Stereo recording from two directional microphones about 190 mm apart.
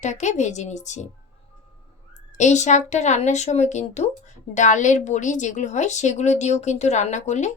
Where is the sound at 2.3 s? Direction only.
40° left (ahead or behind).